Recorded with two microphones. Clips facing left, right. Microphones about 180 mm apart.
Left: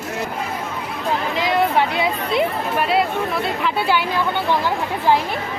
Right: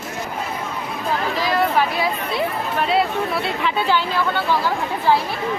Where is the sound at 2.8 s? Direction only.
Centre (ahead or behind).